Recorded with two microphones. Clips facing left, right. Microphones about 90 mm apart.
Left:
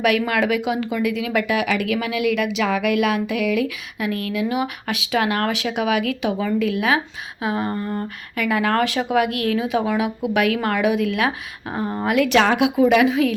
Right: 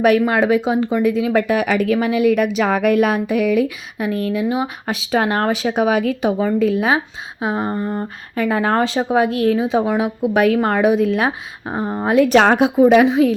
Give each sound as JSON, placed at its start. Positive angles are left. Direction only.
{"t": 0.0, "sound": "speech", "side_deg": -35}